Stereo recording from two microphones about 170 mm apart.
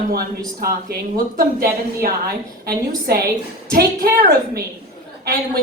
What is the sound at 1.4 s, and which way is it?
A woman's voice, 60° right (ahead or behind).